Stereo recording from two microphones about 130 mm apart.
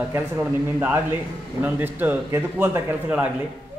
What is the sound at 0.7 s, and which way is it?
A man's voice, 15° right (ahead or behind).